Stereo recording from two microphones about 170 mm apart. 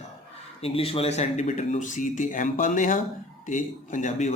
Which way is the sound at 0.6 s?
35° left (ahead or behind).